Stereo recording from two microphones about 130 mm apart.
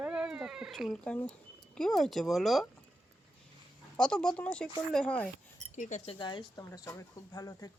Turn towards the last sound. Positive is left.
turn(degrees=25)  # may be behind; listen again after turning